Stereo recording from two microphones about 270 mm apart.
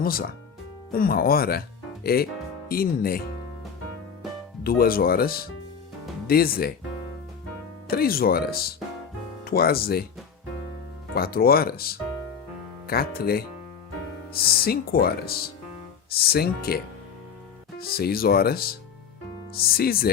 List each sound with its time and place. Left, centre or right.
0.0 s speech: left
4.6 s speech: left
7.9 s speech: left
11.1 s speech: left
14.6 s speech: left